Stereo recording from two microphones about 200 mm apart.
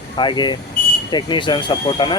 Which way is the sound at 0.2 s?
20° left (ahead or behind).